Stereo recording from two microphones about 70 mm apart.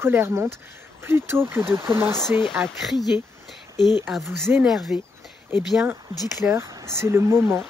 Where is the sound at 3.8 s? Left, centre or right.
Left.